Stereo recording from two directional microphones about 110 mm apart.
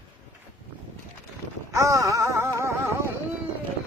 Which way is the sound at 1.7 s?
30° right (ahead or behind).